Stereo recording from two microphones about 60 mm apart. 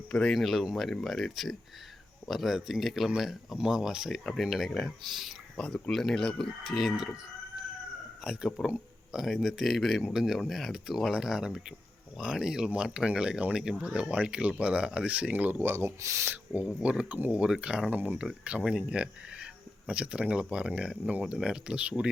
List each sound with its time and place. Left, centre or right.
0.1 s speech: centre
0.3 s speech: centre
5.5 s speech: centre
5.9 s speech: centre
8.6 s a sound: centre
9.2 s speech: centre; by 15.9 s right
16.0 s speech: right
16.6 s speech: centre
17.9 s speech: right